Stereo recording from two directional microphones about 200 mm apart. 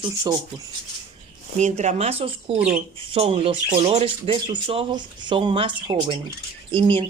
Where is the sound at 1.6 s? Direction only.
35° right (ahead or behind).